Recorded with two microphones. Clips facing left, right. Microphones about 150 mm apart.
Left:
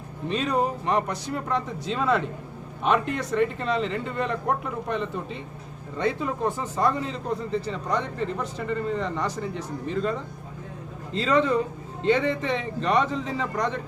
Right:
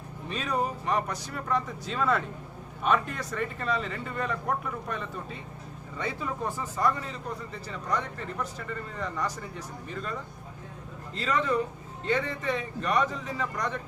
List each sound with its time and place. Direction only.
0.3 s speech: 25° left (ahead or behind)
3.3 s speech: 25° left (ahead or behind)
11.1 s speech: 25° left (ahead or behind)